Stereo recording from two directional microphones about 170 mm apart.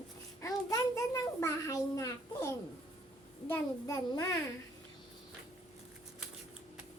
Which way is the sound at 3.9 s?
25° left (ahead or behind).